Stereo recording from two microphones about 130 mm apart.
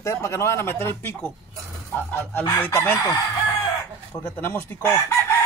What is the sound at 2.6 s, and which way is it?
Speech, 20° left (ahead or behind).